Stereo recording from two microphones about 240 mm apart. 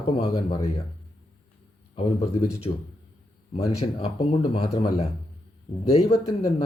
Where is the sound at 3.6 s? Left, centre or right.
Left.